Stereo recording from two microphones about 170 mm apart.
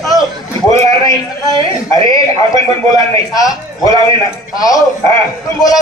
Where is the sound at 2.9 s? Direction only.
20° left (ahead or behind).